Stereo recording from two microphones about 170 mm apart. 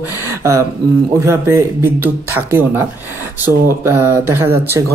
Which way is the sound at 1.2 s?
15° right (ahead or behind).